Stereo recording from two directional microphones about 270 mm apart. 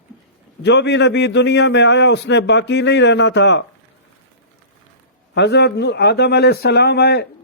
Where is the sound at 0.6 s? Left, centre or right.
Left.